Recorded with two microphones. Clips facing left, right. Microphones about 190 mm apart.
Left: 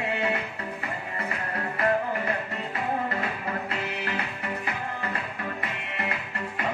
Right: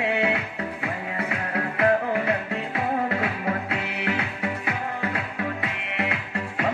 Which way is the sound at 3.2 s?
65° right (ahead or behind).